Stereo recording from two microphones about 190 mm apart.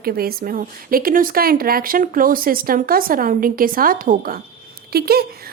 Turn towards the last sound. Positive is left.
turn(degrees=-55)  # may be behind; listen again after turning